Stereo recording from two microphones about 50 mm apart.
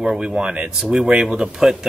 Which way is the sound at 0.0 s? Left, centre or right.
Centre.